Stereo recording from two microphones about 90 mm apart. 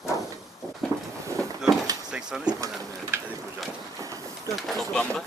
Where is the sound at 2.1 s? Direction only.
5° right (ahead or behind).